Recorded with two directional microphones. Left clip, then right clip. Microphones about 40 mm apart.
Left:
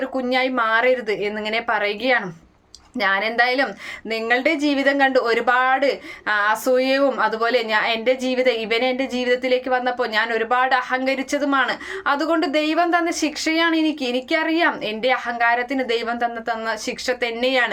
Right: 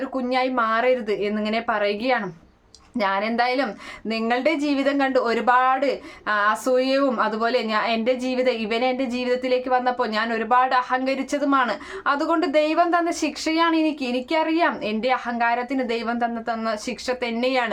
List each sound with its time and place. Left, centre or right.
0.1 s speech: right